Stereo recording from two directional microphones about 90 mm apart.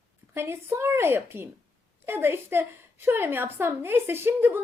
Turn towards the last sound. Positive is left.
turn(degrees=-25)  # may be behind; listen again after turning